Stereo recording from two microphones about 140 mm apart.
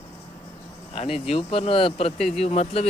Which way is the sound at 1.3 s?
45° left (ahead or behind).